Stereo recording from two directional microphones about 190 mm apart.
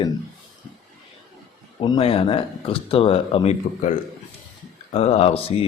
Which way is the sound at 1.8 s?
25° left (ahead or behind).